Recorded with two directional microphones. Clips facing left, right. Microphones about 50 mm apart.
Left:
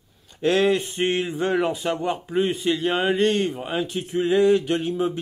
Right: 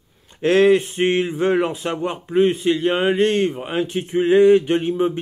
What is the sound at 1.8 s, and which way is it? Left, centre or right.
Speech, centre.